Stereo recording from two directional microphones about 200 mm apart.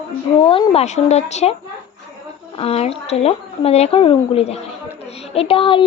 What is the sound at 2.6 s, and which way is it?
A woman's voice, 30° left (ahead or behind).